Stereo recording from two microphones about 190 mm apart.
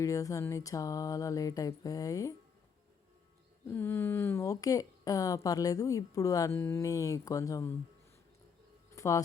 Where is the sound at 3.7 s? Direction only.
10° left (ahead or behind).